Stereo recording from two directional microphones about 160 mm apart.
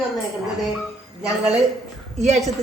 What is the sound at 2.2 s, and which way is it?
Speech, 45° right (ahead or behind).